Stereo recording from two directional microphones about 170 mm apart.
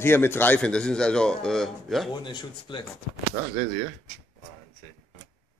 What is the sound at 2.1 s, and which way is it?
Speech, 25° left (ahead or behind).